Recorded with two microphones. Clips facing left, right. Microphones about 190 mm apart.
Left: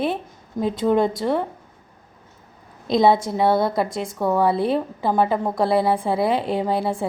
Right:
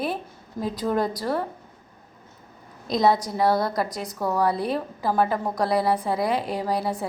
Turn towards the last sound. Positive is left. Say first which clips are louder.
# left 4 dB
turn(degrees=25)  # may be behind; listen again after turning